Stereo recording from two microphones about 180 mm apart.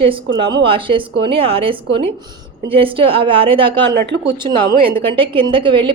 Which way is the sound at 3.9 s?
65° right (ahead or behind).